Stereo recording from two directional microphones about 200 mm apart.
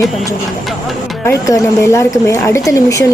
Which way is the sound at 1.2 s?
15° left (ahead or behind).